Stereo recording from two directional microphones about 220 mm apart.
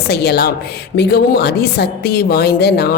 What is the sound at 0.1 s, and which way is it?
A woman's voice, 45° left (ahead or behind).